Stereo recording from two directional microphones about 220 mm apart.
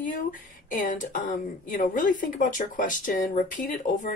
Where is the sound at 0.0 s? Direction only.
35° left (ahead or behind).